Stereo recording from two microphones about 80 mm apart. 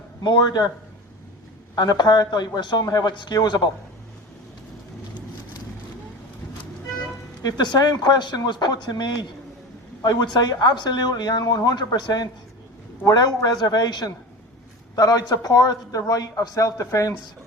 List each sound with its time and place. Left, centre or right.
0.2 s a man's voice: left
1.7 s speech: left
7.4 s a man's voice: left